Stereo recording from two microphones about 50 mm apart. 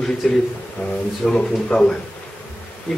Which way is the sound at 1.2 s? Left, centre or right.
Centre.